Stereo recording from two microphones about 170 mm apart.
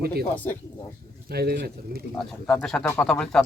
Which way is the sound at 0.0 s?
65° right (ahead or behind).